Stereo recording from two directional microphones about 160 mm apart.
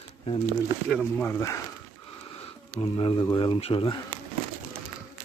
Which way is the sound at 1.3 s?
20° left (ahead or behind).